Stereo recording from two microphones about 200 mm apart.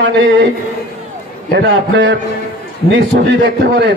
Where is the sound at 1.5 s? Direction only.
60° right (ahead or behind).